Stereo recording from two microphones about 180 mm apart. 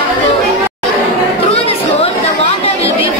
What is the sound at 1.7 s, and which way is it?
Chatter, 35° left (ahead or behind).